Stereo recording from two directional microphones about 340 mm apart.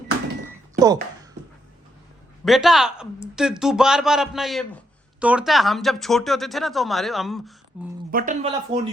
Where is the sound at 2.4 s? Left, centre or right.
Centre.